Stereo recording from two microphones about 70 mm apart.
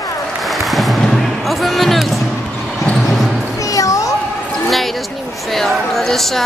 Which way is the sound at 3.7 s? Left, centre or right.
Left.